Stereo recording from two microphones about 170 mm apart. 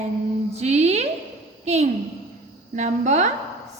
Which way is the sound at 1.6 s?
40° right (ahead or behind).